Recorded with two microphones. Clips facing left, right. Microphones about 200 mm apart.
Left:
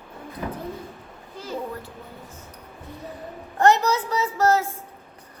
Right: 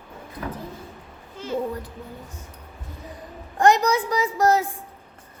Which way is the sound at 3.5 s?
15° right (ahead or behind).